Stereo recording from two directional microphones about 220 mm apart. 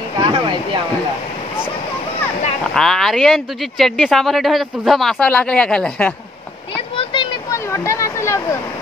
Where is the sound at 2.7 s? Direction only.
Centre (ahead or behind).